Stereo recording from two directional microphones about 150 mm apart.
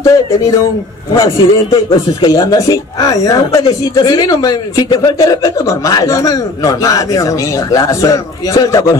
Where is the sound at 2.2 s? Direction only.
25° left (ahead or behind).